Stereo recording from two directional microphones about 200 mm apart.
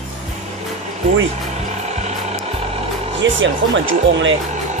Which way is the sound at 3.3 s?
70° right (ahead or behind).